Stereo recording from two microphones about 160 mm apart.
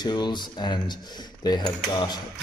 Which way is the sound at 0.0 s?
25° left (ahead or behind).